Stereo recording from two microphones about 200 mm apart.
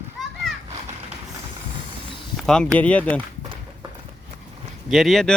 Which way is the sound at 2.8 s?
5° left (ahead or behind).